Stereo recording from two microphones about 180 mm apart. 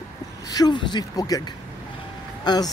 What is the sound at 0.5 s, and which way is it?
Speech, 25° left (ahead or behind).